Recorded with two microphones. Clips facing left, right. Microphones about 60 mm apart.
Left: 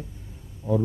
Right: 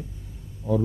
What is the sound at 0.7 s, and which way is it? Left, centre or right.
Speech, left.